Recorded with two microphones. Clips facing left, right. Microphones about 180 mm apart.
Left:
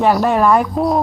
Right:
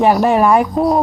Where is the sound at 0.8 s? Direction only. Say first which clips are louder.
Right 2 dB; centre (ahead or behind).